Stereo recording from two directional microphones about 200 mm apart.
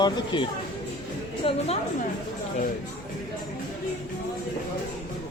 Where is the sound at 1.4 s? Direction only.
25° left (ahead or behind).